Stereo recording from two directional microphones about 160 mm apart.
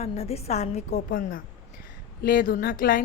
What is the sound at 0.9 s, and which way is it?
A woman's voice, 60° left (ahead or behind).